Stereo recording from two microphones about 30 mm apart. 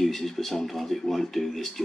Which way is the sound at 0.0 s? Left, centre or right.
Centre.